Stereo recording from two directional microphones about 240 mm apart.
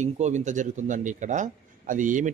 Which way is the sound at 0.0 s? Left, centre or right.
Right.